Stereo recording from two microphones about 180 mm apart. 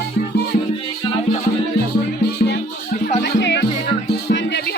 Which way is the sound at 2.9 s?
45° left (ahead or behind).